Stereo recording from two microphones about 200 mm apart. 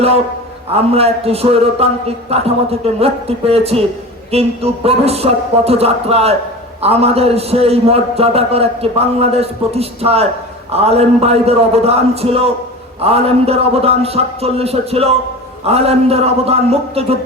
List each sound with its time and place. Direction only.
0.7 s a man's voice: 30° right (ahead or behind)